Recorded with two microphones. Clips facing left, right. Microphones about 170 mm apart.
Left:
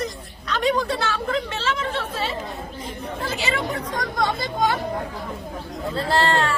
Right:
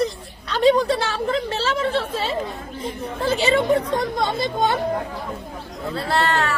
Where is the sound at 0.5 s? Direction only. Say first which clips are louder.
Right 5 dB; 30° right (ahead or behind).